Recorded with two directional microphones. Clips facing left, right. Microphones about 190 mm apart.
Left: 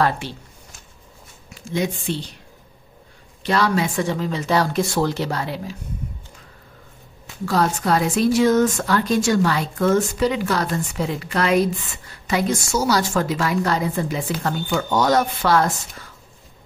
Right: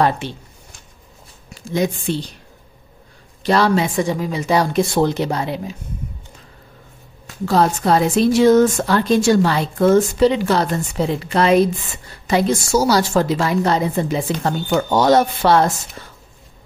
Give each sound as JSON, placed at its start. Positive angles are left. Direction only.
{"t": 0.0, "sound": "a woman's voice", "side_deg": -20}
{"t": 1.5, "sound": "speech", "side_deg": -40}
{"t": 3.4, "sound": "speech", "side_deg": -30}
{"t": 3.8, "sound": "speech", "side_deg": -15}
{"t": 7.4, "sound": "a woman's voice", "side_deg": -25}